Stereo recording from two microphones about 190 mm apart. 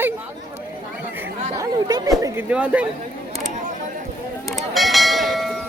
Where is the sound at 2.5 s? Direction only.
5° right (ahead or behind).